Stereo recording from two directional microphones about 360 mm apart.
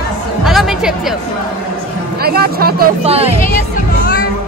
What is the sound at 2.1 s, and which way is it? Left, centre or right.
Speech, right.